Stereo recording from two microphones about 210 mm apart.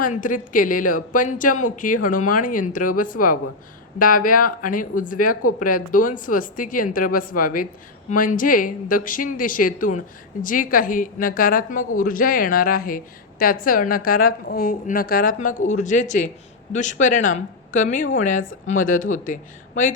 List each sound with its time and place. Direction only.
0.0 s a woman's voice: 40° left (ahead or behind)